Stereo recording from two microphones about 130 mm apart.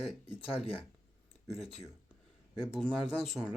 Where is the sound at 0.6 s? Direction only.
45° left (ahead or behind).